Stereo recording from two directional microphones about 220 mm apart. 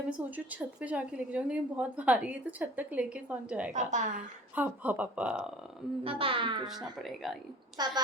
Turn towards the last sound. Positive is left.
turn(degrees=-20)  # may be behind; listen again after turning